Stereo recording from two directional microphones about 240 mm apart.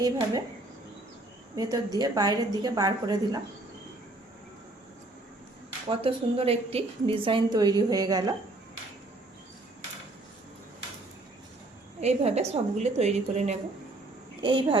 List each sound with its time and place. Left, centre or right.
1.5 s a woman's voice: centre
5.9 s a woman's voice: right
11.9 s a woman's voice: right